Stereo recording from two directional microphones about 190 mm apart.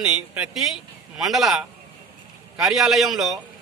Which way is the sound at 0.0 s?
5° right (ahead or behind).